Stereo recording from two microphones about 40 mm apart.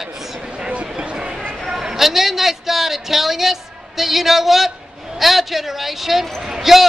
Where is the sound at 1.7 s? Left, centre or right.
Centre.